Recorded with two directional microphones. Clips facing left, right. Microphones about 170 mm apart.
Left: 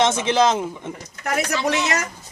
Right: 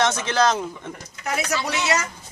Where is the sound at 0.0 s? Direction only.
20° left (ahead or behind).